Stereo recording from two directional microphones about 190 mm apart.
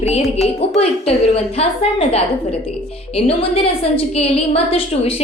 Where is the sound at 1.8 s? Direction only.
30° left (ahead or behind).